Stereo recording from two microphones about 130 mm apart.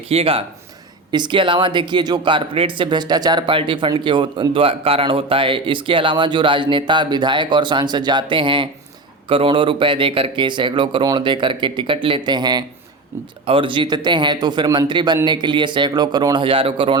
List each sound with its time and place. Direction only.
0.1 s speech: 50° right (ahead or behind)
1.1 s speech: 35° right (ahead or behind)